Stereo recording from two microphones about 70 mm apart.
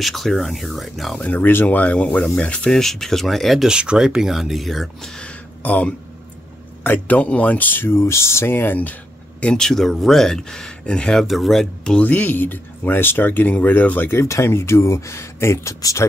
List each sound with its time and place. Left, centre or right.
0.0 s speech: centre
1.1 s speech: left; by 3.6 s centre
3.6 s speech: centre
5.6 s speech: left
9.4 s speech: centre
11.2 s speech: centre
12.0 s speech: left
14.2 s speech: left